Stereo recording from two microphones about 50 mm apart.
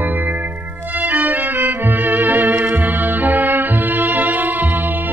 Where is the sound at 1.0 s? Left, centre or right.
Right.